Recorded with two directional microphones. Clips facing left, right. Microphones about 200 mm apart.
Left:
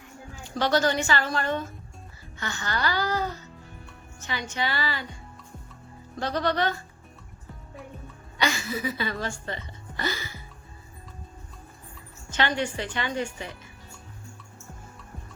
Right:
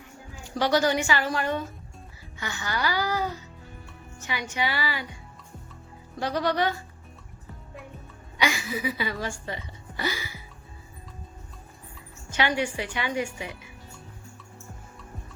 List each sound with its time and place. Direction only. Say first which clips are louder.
0.5 s a woman's voice: right 1 dB; 10° right (ahead or behind)
6.1 s a woman's voice: right 1 dB; 10° right (ahead or behind)
8.4 s speech: even; 10° right (ahead or behind)
12.3 s a woman's voice: right 1 dB; 10° right (ahead or behind)